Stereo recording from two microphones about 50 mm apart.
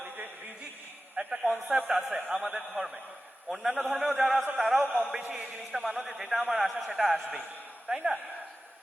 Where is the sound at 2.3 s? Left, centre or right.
Centre.